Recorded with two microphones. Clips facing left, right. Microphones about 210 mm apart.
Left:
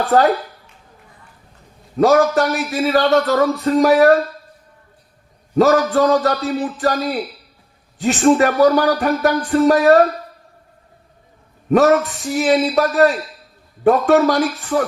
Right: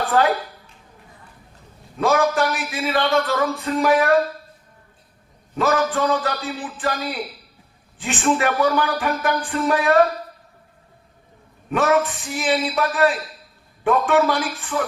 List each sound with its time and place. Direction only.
0.0 s a woman's voice: 40° left (ahead or behind)
2.0 s speech: 40° left (ahead or behind)
5.5 s speech: 40° left (ahead or behind)
11.7 s speech: 40° left (ahead or behind)